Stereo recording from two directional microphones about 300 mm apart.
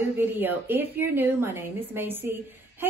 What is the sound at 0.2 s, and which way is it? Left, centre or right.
Speech, centre.